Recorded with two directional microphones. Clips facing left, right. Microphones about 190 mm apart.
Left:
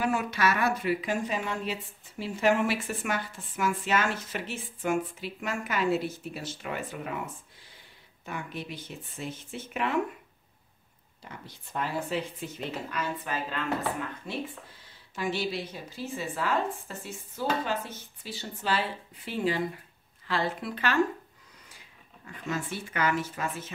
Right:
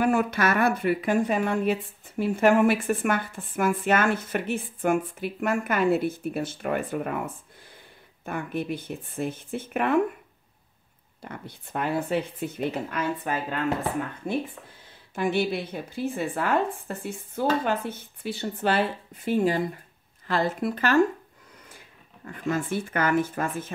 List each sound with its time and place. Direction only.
0.0 s speech: 55° right (ahead or behind)
11.2 s speech: 60° right (ahead or behind)
22.2 s speech: 50° right (ahead or behind)